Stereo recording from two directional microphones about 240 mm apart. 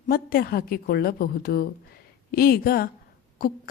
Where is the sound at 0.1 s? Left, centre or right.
Left.